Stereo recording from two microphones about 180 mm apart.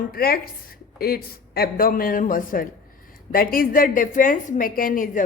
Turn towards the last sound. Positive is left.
turn(degrees=50)  # may be behind; listen again after turning